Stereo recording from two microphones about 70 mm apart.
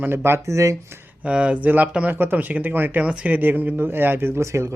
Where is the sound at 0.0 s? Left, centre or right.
Right.